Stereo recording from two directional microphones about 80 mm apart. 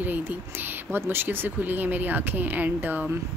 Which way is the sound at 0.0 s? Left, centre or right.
Right.